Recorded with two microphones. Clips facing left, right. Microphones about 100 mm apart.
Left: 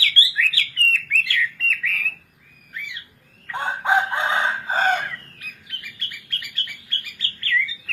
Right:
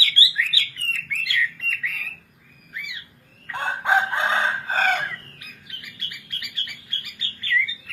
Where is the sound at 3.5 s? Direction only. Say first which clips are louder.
Left 1 dB; 15° left (ahead or behind).